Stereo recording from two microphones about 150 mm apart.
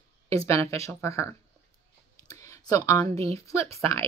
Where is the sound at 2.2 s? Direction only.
20° left (ahead or behind).